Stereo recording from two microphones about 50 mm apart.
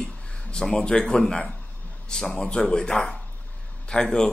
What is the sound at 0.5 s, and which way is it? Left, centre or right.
A man's voice, centre.